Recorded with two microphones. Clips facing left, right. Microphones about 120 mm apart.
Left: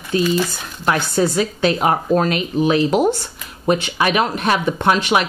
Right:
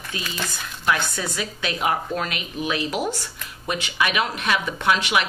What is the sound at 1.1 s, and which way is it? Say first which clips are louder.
Speech: left 12 dB; 35° left (ahead or behind).